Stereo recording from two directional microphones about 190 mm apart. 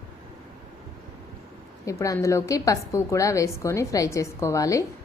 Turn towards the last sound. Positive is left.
turn(degrees=15)  # may be behind; listen again after turning